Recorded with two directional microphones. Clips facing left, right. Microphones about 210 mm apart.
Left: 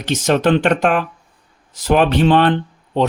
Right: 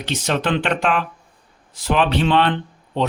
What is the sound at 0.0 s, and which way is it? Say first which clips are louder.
Speech: left 6 dB; 45° left (ahead or behind).